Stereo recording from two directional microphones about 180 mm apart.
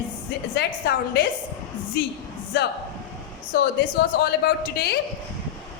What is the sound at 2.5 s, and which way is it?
A woman's voice, 70° left (ahead or behind).